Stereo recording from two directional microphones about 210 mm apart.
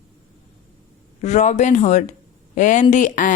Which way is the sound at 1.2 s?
35° left (ahead or behind).